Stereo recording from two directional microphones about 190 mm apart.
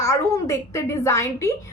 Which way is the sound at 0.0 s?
15° left (ahead or behind).